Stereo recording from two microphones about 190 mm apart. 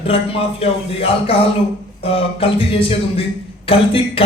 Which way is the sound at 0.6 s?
30° left (ahead or behind).